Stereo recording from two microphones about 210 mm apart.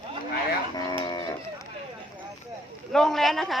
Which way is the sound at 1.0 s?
20° left (ahead or behind).